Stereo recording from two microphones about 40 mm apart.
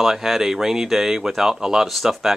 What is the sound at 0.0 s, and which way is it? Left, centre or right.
Speech, centre.